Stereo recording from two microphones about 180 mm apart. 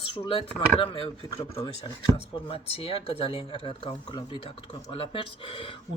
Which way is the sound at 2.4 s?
30° left (ahead or behind).